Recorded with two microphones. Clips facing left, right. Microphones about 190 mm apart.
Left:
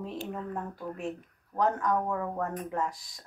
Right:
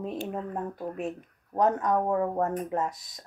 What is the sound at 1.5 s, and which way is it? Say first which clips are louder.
Speech: right 3 dB; 20° right (ahead or behind).